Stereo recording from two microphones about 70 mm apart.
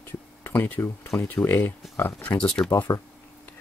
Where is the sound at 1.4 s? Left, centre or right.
Left.